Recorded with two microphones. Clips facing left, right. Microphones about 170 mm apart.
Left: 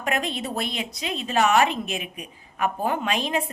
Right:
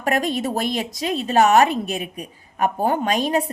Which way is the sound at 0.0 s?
40° right (ahead or behind).